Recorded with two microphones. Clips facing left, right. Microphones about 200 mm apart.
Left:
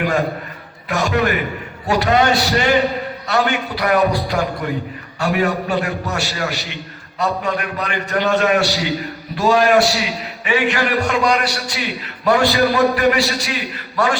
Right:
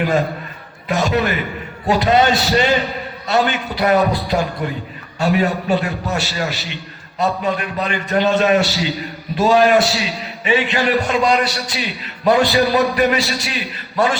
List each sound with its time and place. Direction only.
0.9 s a man's voice: 20° right (ahead or behind)
6.5 s a man's voice: 15° left (ahead or behind)
7.2 s a man's voice: 20° right (ahead or behind)
8.6 s a man's voice: 15° left (ahead or behind)
9.3 s a man's voice: 20° right (ahead or behind)